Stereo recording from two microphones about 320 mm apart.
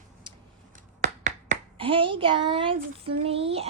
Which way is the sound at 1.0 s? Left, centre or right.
Right.